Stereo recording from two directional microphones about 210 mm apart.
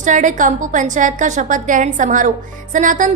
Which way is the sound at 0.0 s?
35° right (ahead or behind).